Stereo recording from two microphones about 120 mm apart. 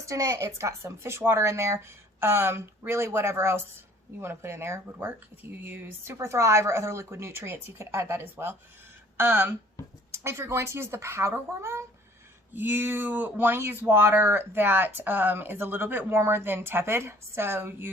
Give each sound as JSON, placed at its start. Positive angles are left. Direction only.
{"t": 0.0, "sound": "a woman's voice", "side_deg": -25}